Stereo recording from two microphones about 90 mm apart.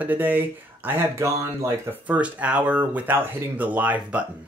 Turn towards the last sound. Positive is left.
turn(degrees=-15)  # may be behind; listen again after turning